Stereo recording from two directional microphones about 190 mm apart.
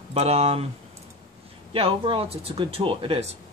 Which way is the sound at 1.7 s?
30° right (ahead or behind).